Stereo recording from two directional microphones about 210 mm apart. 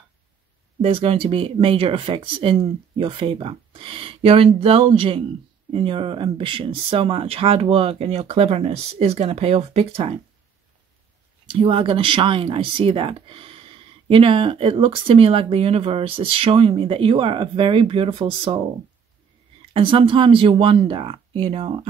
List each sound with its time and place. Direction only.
0.7 s speech: 25° right (ahead or behind)
11.4 s speech: 25° right (ahead or behind)
19.7 s speech: 25° right (ahead or behind)